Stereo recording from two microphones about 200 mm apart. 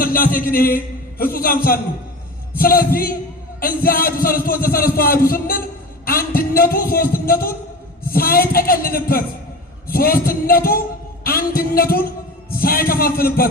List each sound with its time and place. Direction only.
0.0 s music: 45° left (ahead or behind)